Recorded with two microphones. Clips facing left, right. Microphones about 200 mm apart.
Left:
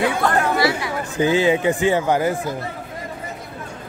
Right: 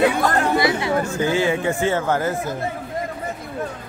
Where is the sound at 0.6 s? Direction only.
20° right (ahead or behind).